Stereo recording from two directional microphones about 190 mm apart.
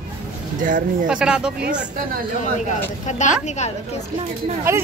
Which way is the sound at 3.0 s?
40° left (ahead or behind).